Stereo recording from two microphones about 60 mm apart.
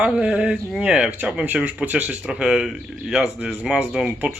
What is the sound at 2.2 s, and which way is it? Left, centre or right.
Speech, centre.